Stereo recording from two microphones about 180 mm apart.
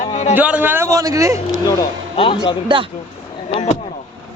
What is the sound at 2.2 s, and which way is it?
Speech, 30° left (ahead or behind).